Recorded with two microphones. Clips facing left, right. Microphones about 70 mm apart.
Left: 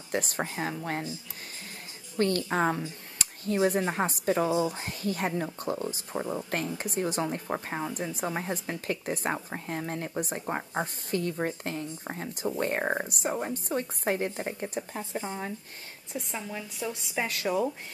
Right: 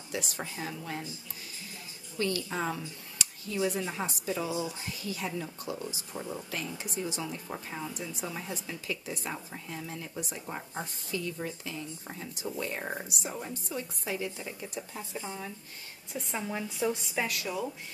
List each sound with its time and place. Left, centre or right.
0.1 s speech: left
2.1 s speech: left
6.8 s speech: left
16.2 s a woman's voice: centre
16.4 s speech: centre
16.9 s a woman's voice: centre
17.3 s speech: left